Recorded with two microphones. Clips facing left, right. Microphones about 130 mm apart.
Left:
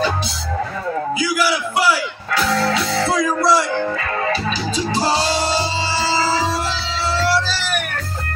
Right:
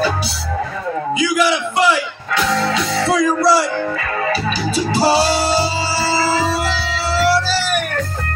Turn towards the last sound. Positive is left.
turn(degrees=-15)  # may be behind; listen again after turning